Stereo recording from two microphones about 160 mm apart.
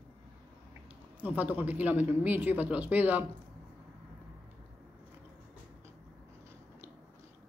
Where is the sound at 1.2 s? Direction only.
10° right (ahead or behind).